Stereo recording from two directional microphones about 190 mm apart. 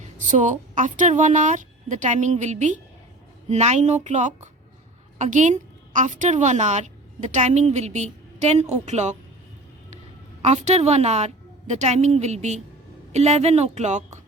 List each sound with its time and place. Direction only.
0.2 s a woman's voice: 40° right (ahead or behind)
10.4 s a woman's voice: 40° right (ahead or behind)